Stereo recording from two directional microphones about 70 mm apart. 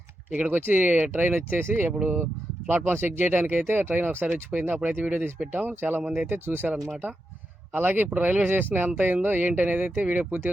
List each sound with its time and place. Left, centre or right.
0.3 s speech: right
6.7 s speech: centre
7.7 s speech: right